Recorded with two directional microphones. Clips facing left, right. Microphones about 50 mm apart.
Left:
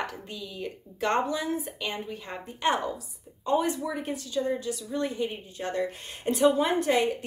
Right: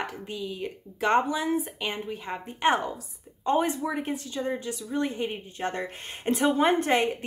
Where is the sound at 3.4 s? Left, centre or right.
Right.